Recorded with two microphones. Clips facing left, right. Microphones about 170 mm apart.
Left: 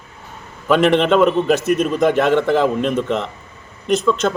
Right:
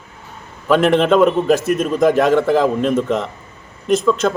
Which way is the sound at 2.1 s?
40° right (ahead or behind).